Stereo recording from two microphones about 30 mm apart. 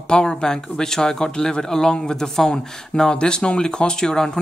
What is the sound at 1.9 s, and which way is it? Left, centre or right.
Speech, left.